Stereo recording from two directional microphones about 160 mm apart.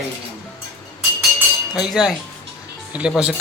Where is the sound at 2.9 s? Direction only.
10° right (ahead or behind).